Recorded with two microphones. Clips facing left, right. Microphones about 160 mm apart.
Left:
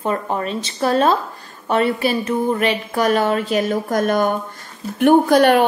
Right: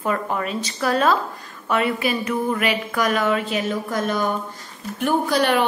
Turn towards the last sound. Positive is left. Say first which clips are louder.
# left 7 dB
turn(degrees=50)  # may be behind; listen again after turning